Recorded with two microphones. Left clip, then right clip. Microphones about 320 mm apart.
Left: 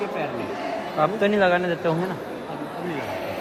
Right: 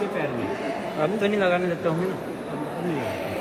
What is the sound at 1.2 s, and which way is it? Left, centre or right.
Speech, left.